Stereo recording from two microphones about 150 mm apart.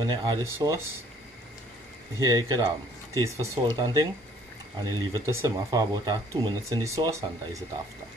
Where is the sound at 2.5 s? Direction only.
25° right (ahead or behind).